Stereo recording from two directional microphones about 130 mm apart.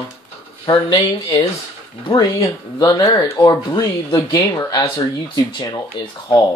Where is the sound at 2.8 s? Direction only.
30° left (ahead or behind).